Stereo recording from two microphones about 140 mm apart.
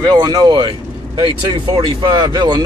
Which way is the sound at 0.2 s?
30° right (ahead or behind).